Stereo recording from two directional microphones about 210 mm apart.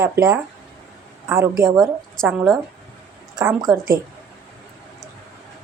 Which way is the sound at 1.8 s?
Centre (ahead or behind).